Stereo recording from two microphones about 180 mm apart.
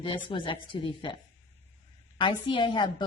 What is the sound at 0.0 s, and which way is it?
Speech, 30° left (ahead or behind).